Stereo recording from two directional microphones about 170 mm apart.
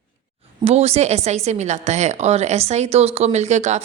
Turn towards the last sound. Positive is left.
turn(degrees=-45)  # may be behind; listen again after turning